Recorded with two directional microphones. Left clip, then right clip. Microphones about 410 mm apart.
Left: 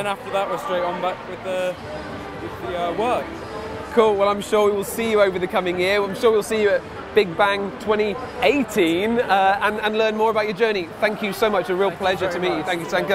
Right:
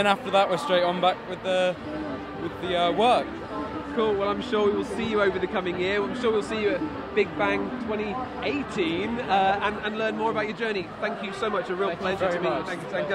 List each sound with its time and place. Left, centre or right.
0.0 s speech: right
2.7 s speech: right
3.9 s speech: centre